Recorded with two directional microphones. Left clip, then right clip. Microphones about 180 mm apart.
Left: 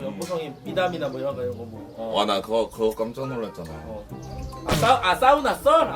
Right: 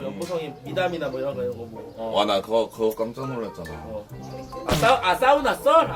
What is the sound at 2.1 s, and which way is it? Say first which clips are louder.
Speech: right 1 dB; 25° left (ahead or behind).